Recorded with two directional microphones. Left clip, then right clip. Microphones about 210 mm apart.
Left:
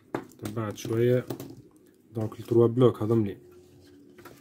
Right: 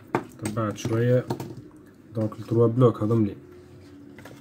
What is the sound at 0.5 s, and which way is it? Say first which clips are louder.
Speech: right 2 dB; 50° left (ahead or behind).